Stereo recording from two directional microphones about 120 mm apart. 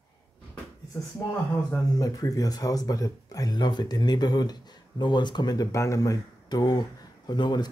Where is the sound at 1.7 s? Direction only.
30° left (ahead or behind).